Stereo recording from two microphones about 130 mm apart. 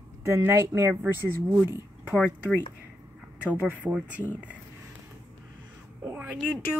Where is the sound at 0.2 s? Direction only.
20° right (ahead or behind).